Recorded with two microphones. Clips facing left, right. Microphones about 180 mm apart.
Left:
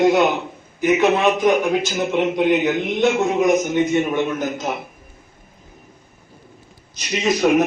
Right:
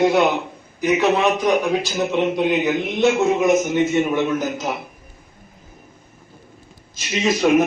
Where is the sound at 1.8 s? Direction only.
20° left (ahead or behind).